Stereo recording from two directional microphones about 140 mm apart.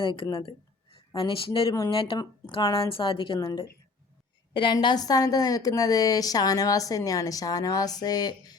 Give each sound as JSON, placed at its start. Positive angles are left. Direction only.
{"t": 0.0, "sound": "a woman's voice", "side_deg": 40}
{"t": 0.4, "sound": "a sound", "side_deg": 40}
{"t": 1.3, "sound": "a woman's voice", "side_deg": 40}
{"t": 4.5, "sound": "a woman's voice", "side_deg": 35}